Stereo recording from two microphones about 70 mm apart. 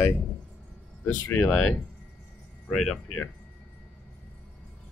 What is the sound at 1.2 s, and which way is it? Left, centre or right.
Speech, left.